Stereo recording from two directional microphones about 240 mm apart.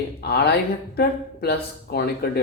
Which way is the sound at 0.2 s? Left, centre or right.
Left.